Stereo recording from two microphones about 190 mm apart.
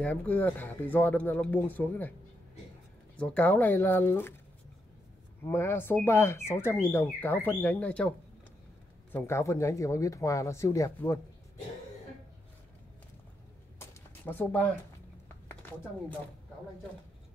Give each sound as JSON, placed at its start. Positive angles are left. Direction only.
{"t": 0.0, "sound": "speech", "side_deg": 5}
{"t": 3.2, "sound": "speech", "side_deg": 10}
{"t": 5.4, "sound": "speech", "side_deg": 10}
{"t": 9.1, "sound": "speech", "side_deg": 15}
{"t": 13.7, "sound": "a sound", "side_deg": 10}